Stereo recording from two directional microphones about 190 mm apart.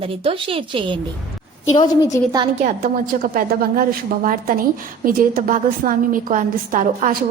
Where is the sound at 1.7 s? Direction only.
20° left (ahead or behind).